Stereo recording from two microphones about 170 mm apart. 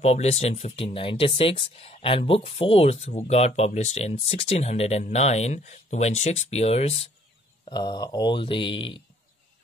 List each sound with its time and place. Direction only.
0.0 s speech: 40° left (ahead or behind)
7.6 s speech: 25° left (ahead or behind)